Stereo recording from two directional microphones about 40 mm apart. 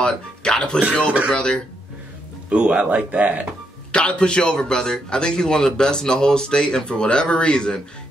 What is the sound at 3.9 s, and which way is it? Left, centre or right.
Speech, left.